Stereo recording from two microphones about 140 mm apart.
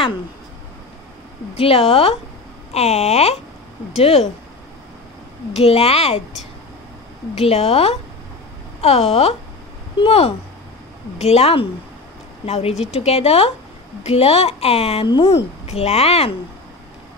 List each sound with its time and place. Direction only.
1.6 s a woman's voice: 40° left (ahead or behind)
5.5 s speech: 45° left (ahead or behind)
7.3 s speech: 45° left (ahead or behind)
15.0 s a woman's voice: 30° left (ahead or behind)
15.3 s speech: 50° left (ahead or behind)